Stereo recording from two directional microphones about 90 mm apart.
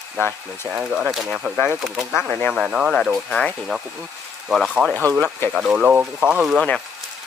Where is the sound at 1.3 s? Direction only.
15° right (ahead or behind).